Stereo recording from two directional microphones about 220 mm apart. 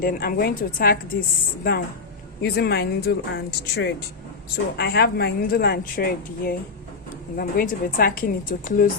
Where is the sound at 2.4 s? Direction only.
45° left (ahead or behind).